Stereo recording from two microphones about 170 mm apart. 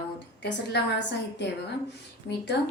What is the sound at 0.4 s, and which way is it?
A woman's voice, 90° left.